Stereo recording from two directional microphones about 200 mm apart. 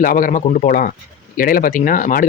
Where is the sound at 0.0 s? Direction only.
45° left (ahead or behind).